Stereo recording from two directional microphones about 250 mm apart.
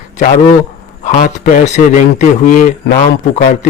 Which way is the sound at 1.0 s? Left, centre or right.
Left.